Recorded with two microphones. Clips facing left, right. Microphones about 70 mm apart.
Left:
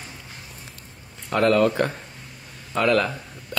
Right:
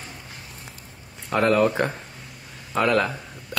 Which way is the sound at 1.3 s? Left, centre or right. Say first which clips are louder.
Left 1 dB; centre.